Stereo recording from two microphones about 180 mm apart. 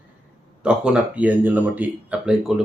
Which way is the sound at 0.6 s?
5° right (ahead or behind).